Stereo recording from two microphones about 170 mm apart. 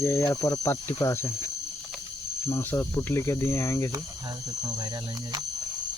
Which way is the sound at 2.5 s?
10° left (ahead or behind).